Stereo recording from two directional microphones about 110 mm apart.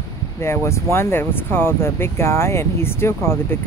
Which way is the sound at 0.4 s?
25° left (ahead or behind).